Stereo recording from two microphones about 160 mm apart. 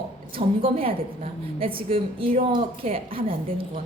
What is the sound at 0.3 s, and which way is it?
A woman's voice, 35° right (ahead or behind).